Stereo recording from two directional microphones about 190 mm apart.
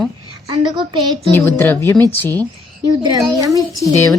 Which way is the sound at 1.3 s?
10° left (ahead or behind).